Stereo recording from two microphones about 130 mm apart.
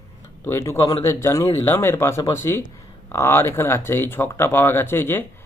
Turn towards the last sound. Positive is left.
turn(degrees=15)  # may be behind; listen again after turning